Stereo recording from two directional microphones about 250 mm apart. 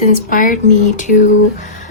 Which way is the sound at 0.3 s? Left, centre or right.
Left.